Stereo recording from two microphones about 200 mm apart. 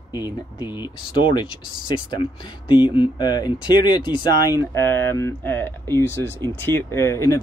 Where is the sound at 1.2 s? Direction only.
25° left (ahead or behind).